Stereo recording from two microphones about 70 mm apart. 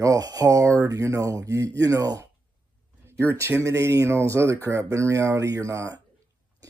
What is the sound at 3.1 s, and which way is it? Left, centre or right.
Speech, right.